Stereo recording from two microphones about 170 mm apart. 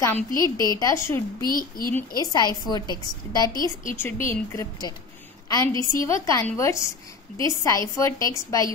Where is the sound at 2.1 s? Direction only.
20° left (ahead or behind).